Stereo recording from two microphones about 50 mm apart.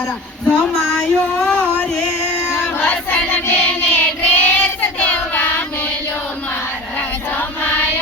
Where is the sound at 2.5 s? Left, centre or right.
Left.